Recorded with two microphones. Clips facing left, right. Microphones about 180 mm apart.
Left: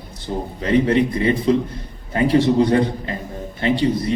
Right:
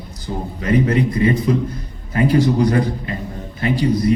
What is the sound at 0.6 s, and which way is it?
A man's voice, 25° left (ahead or behind).